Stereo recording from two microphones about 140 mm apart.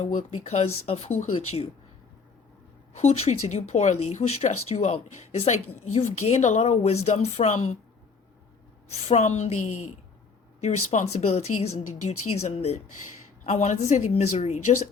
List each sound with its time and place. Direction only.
0.0 s speech: 55° left (ahead or behind)
2.9 s speech: 50° left (ahead or behind)
8.9 s speech: 55° left (ahead or behind)